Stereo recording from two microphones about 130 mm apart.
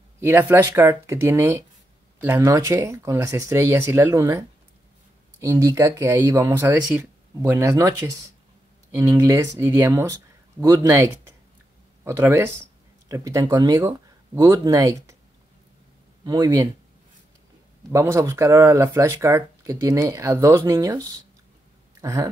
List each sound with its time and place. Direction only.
0.2 s speech: 15° right (ahead or behind)
12.0 s speech: 20° right (ahead or behind)
17.9 s speech: 25° right (ahead or behind)